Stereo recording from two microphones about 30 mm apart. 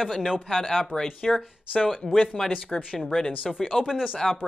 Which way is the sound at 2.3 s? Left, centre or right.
Centre.